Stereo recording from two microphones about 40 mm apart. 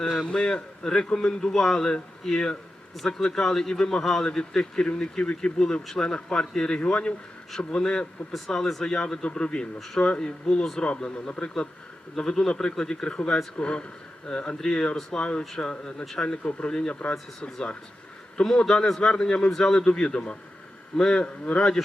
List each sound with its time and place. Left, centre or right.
0.3 s speech: left; by 10.8 s centre
10.8 s speech: left
18.4 s speech: centre
19.5 s speech: centre
19.7 s speech: left
21.2 s speech: left